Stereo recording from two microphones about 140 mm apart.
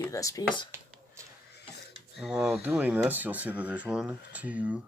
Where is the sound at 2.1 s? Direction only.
Centre (ahead or behind).